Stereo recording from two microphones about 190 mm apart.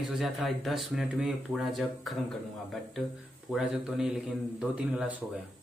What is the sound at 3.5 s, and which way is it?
Speech, centre (ahead or behind).